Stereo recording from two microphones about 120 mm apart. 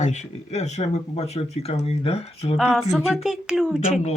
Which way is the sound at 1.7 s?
55° left (ahead or behind).